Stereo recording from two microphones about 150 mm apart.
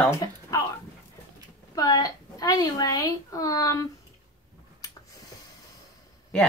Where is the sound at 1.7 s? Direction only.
25° left (ahead or behind).